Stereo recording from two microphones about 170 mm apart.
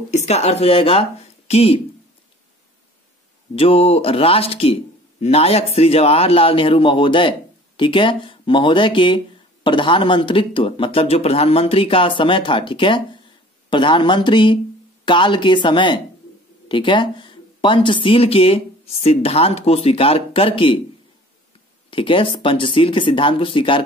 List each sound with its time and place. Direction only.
0.1 s a man's voice: 40° left (ahead or behind)
3.5 s a man's voice: 35° left (ahead or behind)
21.9 s a man's voice: 30° left (ahead or behind)